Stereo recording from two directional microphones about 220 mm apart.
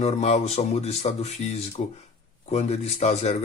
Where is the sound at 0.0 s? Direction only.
30° left (ahead or behind).